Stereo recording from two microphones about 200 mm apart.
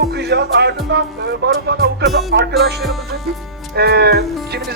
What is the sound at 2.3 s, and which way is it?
Speech, 50° right (ahead or behind).